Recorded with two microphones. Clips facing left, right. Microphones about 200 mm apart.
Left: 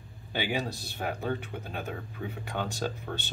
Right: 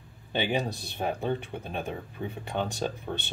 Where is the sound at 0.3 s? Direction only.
25° right (ahead or behind).